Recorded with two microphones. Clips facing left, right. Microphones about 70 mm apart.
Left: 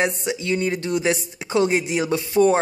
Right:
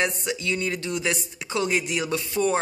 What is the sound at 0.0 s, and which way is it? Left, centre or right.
Speech, left.